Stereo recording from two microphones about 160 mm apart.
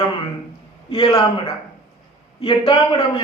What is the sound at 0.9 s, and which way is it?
Speech, 30° left (ahead or behind).